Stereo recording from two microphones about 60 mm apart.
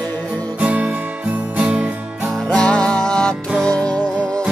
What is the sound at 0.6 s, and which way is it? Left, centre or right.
Guitar, right.